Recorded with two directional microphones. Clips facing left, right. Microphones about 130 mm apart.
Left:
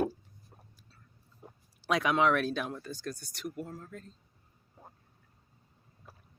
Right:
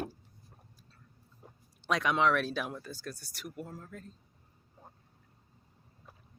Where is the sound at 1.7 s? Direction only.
5° left (ahead or behind).